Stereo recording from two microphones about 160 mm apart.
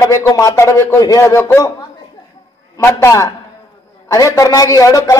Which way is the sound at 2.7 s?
20° left (ahead or behind).